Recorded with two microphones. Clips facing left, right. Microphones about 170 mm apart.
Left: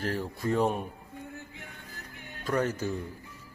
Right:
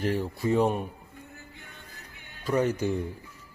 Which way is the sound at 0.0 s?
15° right (ahead or behind).